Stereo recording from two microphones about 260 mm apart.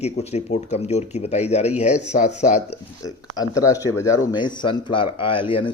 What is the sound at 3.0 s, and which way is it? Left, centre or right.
Speech, centre.